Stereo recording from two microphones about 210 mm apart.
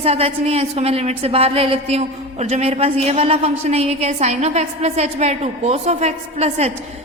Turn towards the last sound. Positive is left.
turn(degrees=-30)  # may be behind; listen again after turning